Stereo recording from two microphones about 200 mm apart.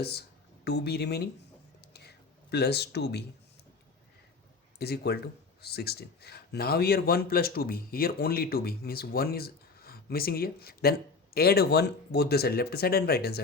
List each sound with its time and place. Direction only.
0.0 s speech: 55° left (ahead or behind)
1.9 s a sound: 55° left (ahead or behind)
4.8 s a man's voice: 50° left (ahead or behind)